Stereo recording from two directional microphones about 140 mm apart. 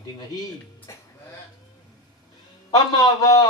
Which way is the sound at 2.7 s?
25° left (ahead or behind).